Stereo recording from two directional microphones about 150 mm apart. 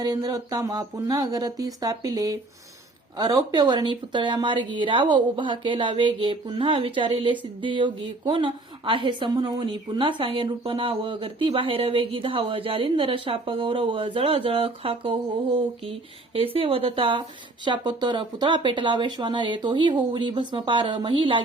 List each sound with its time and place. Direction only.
0.0 s a woman's voice: 25° right (ahead or behind)